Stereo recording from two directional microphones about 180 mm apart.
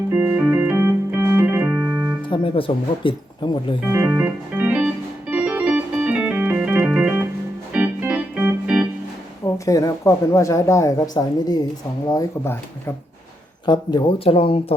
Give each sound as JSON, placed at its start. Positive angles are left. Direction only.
{"t": 0.1, "sound": "organ", "side_deg": -10}
{"t": 2.3, "sound": "speech", "side_deg": 30}
{"t": 3.8, "sound": "organ", "side_deg": -10}
{"t": 9.6, "sound": "speech", "side_deg": 20}
{"t": 13.7, "sound": "speech", "side_deg": 25}